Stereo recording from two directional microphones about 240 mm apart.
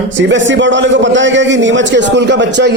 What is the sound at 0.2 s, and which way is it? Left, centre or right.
A man's voice, right.